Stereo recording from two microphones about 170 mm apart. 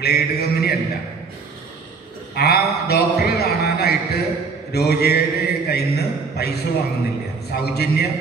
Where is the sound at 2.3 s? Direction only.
70° left (ahead or behind).